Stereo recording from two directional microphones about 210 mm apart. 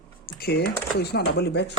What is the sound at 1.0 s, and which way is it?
Speech, 50° left (ahead or behind).